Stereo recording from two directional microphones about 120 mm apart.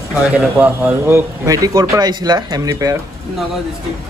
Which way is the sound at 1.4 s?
30° right (ahead or behind).